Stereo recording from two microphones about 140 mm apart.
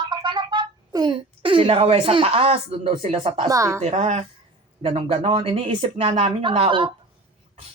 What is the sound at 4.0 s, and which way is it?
Speech, 55° right (ahead or behind).